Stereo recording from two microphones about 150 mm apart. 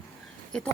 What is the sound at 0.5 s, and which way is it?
Speech, 5° left (ahead or behind).